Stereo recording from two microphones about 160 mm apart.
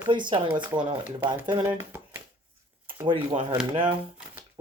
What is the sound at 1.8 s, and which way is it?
Shuffling cards, 15° right (ahead or behind).